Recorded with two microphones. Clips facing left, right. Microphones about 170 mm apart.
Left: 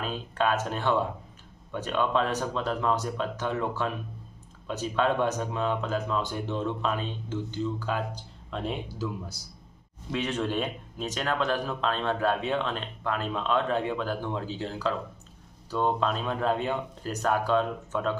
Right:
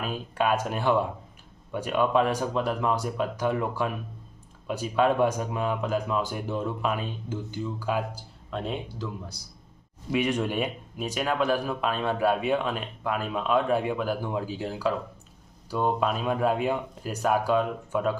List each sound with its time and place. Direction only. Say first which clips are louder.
0.0 s speech: right 1 dB; 10° right (ahead or behind)
10.1 s speech: right 3 dB; 15° right (ahead or behind)